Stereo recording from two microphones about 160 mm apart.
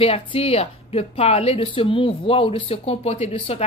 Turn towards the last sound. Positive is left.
turn(degrees=40)  # may be behind; listen again after turning